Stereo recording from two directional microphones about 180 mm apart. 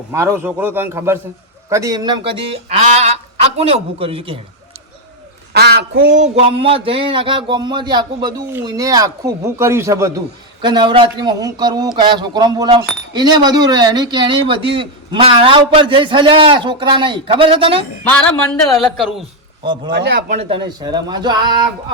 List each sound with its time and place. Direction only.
0.1 s a man's voice: 15° right (ahead or behind); by 4.4 s 30° right (ahead or behind)
5.5 s speech: 65° right (ahead or behind)
6.1 s a man's voice: 35° right (ahead or behind)
19.6 s speech: 25° right (ahead or behind)
19.9 s speech: 65° right (ahead or behind)
20.3 s speech: 30° right (ahead or behind)